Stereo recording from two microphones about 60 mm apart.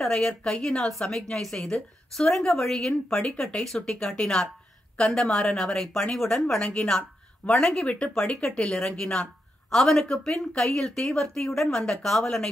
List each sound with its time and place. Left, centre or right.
0.0 s a woman's voice: centre
6.6 s speech: left
7.5 s a woman's voice: centre
7.8 s speech: left
8.5 s a woman's voice: centre